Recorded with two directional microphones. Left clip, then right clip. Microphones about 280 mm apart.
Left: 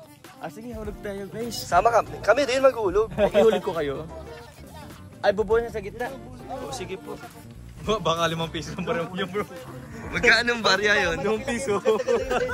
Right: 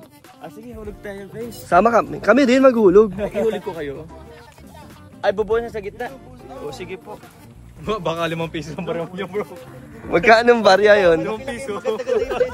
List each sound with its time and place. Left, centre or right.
0.4 s speech: centre
1.7 s a man's voice: right
3.2 s speech: centre
5.2 s a man's voice: right
10.1 s a man's voice: centre
11.2 s speech: left